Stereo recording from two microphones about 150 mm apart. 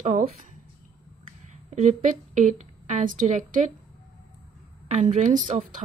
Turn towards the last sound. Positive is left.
turn(degrees=-60)  # may be behind; listen again after turning